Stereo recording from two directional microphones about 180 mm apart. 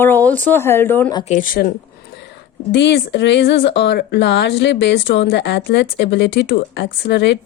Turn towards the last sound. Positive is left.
turn(degrees=70)  # may be behind; listen again after turning